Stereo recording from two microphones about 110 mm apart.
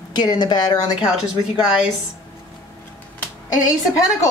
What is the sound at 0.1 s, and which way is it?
Speech, 40° left (ahead or behind).